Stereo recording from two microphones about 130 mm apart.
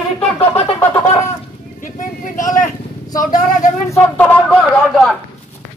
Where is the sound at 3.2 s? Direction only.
90° left.